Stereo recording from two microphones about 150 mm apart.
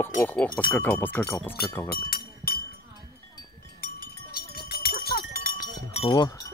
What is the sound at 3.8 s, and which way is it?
Cowbell, 75° left (ahead or behind).